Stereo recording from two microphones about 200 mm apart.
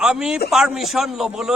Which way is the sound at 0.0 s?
5° right (ahead or behind).